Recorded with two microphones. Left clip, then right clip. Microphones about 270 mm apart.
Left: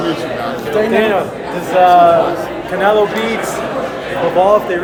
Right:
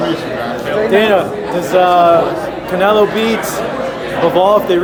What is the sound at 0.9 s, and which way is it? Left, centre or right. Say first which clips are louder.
Speech: right 2 dB; right.